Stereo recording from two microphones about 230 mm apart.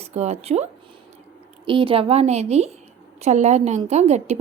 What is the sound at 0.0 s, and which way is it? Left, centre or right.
A woman's voice, right.